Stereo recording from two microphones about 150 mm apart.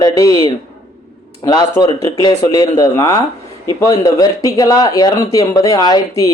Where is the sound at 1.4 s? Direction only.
25° left (ahead or behind).